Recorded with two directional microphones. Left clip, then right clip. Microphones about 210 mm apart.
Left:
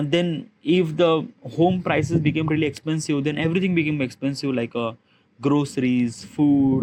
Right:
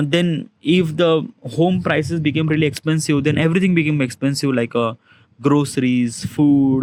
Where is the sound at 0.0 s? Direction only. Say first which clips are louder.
Right 3 dB; 35° right (ahead or behind).